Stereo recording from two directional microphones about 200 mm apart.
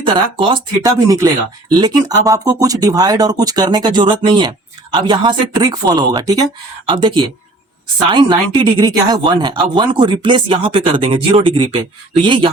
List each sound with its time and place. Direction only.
0.0 s speech: 25° right (ahead or behind)